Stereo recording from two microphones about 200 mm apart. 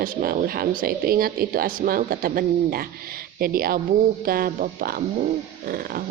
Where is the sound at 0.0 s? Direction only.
45° right (ahead or behind).